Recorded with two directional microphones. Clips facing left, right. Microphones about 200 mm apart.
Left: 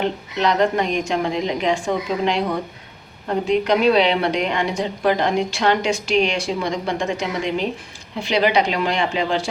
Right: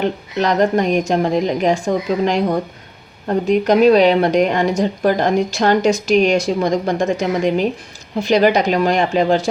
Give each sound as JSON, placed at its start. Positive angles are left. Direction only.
{"t": 0.3, "sound": "a woman's voice", "side_deg": -45}
{"t": 3.4, "sound": "a woman's voice", "side_deg": -45}